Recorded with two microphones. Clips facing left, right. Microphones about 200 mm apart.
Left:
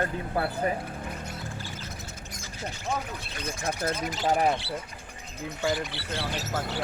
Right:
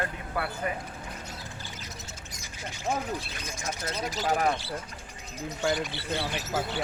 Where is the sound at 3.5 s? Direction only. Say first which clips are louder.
Left 7 dB; 55° left (ahead or behind).